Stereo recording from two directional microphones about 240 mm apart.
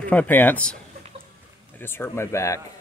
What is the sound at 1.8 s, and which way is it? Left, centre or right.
Speech, centre.